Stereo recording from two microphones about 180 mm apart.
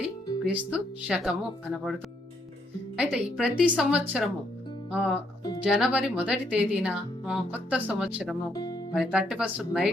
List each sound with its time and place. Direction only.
0.4 s speech: 5° right (ahead or behind)
4.9 s music: 5° right (ahead or behind)
5.6 s speech: 5° right (ahead or behind)
8.5 s music: 20° left (ahead or behind)
9.0 s speech: 5° right (ahead or behind)